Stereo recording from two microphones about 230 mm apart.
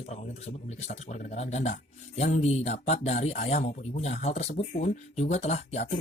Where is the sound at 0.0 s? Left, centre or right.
Left.